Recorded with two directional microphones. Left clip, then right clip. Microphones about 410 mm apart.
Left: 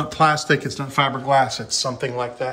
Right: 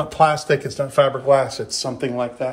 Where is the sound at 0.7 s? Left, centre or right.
Centre.